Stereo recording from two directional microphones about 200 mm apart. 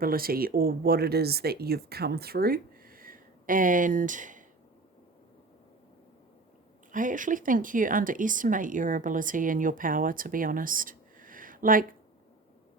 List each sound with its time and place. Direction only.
0.0 s speech: 45° right (ahead or behind)
6.9 s speech: 40° right (ahead or behind)